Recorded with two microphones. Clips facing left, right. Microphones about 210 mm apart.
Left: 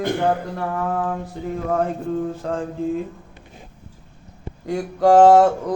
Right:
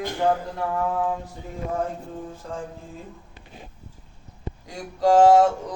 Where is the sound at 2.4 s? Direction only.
75° left (ahead or behind).